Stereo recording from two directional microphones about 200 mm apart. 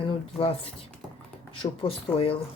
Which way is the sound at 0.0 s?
25° left (ahead or behind).